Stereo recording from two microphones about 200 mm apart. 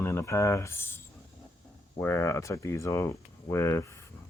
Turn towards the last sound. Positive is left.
turn(degrees=15)  # may be behind; listen again after turning